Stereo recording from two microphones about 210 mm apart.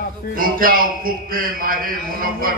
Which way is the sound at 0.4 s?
45° right (ahead or behind).